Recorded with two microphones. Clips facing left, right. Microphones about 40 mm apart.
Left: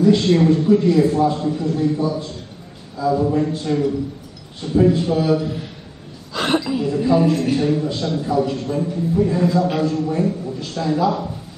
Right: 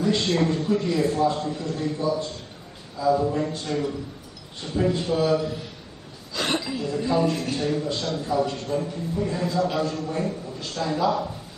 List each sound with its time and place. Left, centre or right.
0.0 s a man's voice: centre
6.3 s a sound: centre
6.7 s a man's voice: centre